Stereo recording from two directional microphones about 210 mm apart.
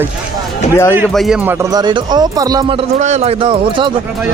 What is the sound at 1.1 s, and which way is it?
Speech, centre (ahead or behind).